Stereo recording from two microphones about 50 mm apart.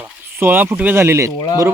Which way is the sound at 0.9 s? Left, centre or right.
Right.